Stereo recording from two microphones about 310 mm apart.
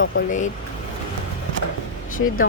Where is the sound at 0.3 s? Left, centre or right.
Left.